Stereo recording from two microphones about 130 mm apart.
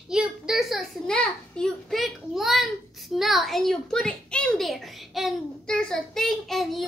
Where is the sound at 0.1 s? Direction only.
5° right (ahead or behind).